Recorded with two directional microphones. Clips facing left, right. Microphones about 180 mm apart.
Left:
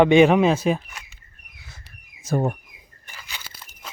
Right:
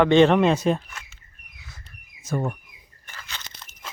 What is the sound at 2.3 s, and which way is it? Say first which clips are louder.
Speech: left 4 dB; 35° left (ahead or behind).